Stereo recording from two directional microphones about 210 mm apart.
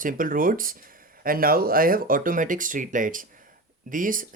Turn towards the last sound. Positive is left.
turn(degrees=-40)  # may be behind; listen again after turning